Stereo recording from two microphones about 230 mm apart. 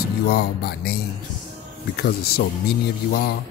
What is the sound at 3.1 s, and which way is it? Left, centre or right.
Speech, left.